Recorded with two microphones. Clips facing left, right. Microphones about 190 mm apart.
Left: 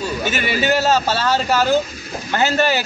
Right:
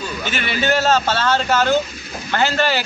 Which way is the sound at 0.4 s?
10° left (ahead or behind).